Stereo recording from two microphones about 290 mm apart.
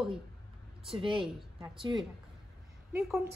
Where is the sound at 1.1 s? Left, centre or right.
Centre.